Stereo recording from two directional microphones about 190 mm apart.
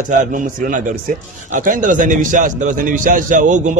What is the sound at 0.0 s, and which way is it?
A man's voice, 40° right (ahead or behind).